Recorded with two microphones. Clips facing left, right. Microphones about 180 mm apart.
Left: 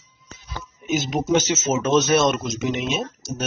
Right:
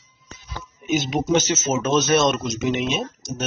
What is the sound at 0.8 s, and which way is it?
Speech, centre (ahead or behind).